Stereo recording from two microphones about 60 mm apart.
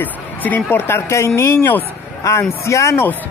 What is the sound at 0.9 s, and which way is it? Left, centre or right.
Speech, left.